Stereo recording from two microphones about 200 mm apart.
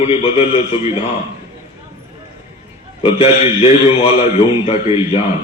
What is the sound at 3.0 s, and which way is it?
A man's voice, 30° left (ahead or behind).